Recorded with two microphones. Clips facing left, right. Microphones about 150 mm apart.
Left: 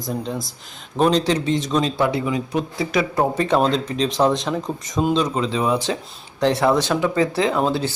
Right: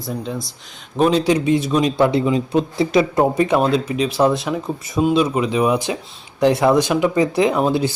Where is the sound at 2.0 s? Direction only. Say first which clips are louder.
Right 5 dB; 25° right (ahead or behind).